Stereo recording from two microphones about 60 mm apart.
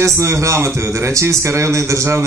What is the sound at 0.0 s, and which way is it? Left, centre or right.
A man's voice, right.